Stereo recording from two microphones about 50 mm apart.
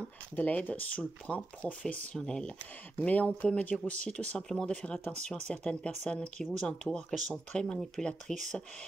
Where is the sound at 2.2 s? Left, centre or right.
Centre.